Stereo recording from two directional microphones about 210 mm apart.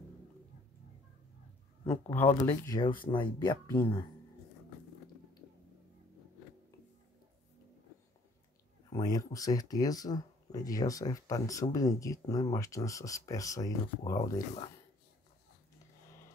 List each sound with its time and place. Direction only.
1.9 s speech: 10° left (ahead or behind)
8.9 s speech: 20° left (ahead or behind)